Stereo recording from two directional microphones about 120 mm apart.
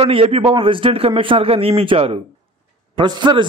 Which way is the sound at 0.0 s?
50° right (ahead or behind).